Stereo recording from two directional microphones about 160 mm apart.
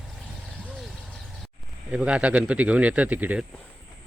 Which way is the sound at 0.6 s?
Centre (ahead or behind).